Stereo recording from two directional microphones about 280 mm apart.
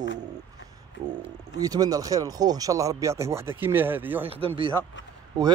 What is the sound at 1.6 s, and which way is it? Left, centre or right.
Speech, centre.